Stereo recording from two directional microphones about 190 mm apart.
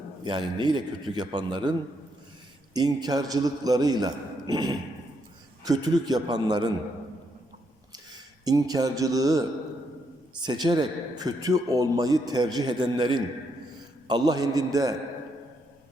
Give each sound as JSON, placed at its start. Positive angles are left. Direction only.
{"t": 0.3, "sound": "a man's voice", "side_deg": -25}
{"t": 2.7, "sound": "a man's voice", "side_deg": -20}
{"t": 8.4, "sound": "a man's voice", "side_deg": -20}
{"t": 10.4, "sound": "a man's voice", "side_deg": -20}